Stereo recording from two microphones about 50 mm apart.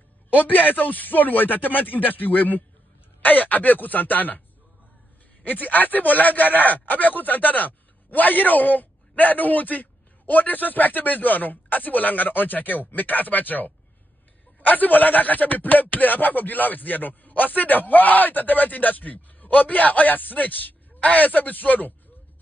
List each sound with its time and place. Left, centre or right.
0.3 s speech: left
5.4 s speech: left